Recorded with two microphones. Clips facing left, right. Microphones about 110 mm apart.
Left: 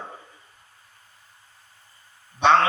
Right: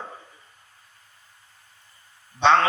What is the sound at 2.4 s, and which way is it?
Speech, 30° right (ahead or behind).